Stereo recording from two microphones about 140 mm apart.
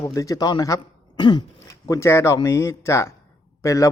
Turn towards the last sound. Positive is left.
turn(degrees=20)  # may be behind; listen again after turning